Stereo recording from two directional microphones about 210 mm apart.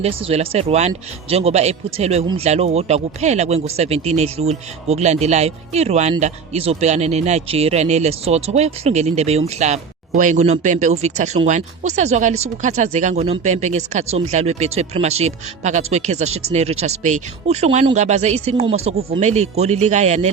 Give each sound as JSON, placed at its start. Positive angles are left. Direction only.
{"t": 0.0, "sound": "speech", "side_deg": -25}